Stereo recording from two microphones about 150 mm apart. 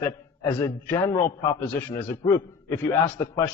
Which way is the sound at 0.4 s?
20° left (ahead or behind).